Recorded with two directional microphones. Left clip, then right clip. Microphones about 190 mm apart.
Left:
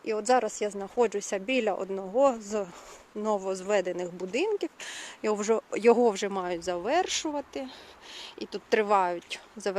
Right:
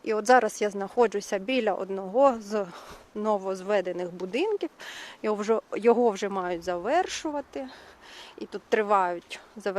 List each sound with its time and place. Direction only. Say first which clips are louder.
0.0 s speech: right 4 dB; 15° right (ahead or behind); by 9.7 s centre (ahead or behind)